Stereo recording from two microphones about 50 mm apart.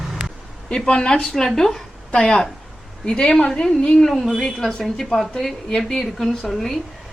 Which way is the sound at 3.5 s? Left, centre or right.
Centre.